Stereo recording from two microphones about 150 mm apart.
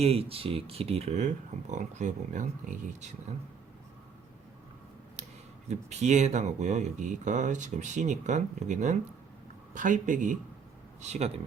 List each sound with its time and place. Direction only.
0.0 s speech: 40° right (ahead or behind); by 3.1 s 55° right (ahead or behind)
5.6 s speech: 50° right (ahead or behind)